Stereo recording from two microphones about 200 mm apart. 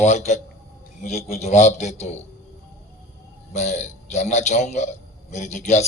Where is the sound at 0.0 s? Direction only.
35° left (ahead or behind).